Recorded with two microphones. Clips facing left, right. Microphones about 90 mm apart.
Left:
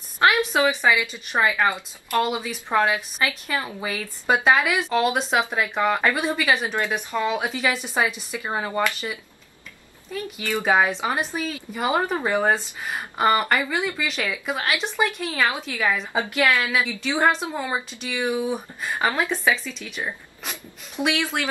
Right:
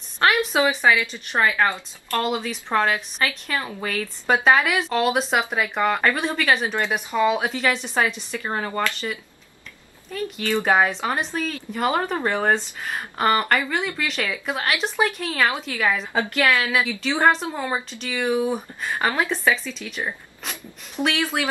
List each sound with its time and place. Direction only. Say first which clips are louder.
0.2 s a sound: left 1 dB; centre (ahead or behind)
1.0 s a woman's voice: even; 10° left (ahead or behind)
10.3 s speech: right 1 dB; 10° left (ahead or behind)
16.1 s a woman's voice: right 1 dB; 15° left (ahead or behind)
16.6 s speech: right 1 dB; centre (ahead or behind)